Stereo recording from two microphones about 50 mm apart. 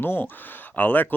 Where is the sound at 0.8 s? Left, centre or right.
Left.